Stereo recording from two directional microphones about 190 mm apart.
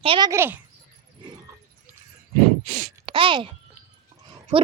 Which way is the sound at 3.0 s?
25° right (ahead or behind).